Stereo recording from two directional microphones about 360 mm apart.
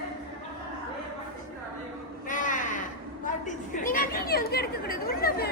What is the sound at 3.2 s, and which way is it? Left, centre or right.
A woman's voice, left.